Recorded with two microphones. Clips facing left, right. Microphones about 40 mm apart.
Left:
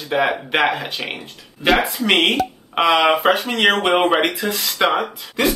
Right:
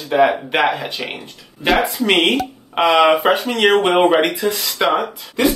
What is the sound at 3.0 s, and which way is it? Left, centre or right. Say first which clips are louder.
Speech: right 2 dB; centre.